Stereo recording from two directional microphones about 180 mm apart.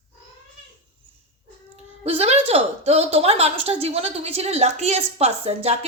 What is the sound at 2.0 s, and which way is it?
A woman's voice, 35° right (ahead or behind).